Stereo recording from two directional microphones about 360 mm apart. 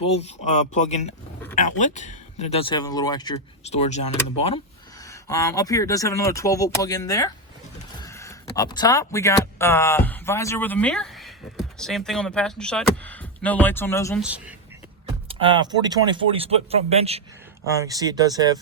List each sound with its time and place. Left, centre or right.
0.0 s speech: centre
14.3 s speech: centre